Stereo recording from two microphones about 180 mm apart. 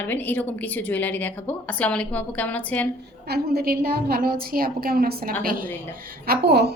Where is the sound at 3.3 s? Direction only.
60° right (ahead or behind).